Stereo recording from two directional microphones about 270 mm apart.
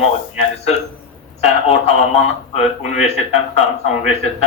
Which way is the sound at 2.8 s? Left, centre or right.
Left.